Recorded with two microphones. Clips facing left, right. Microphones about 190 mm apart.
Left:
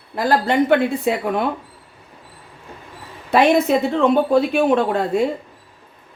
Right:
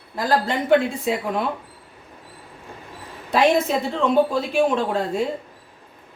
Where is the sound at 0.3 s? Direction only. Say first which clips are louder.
Left 3 dB; 65° left (ahead or behind).